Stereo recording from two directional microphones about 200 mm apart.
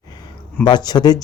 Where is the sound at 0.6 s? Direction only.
20° left (ahead or behind).